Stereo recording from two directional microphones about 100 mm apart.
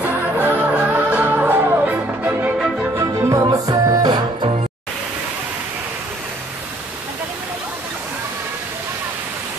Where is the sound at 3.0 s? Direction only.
35° right (ahead or behind).